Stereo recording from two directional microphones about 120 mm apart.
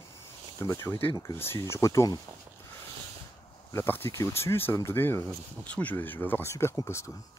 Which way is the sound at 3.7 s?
20° left (ahead or behind).